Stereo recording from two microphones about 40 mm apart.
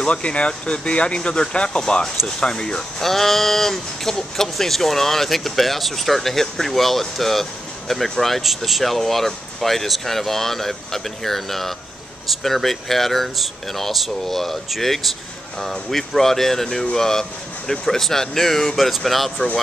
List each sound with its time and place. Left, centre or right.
0.0 s speech: left
3.0 s speech: centre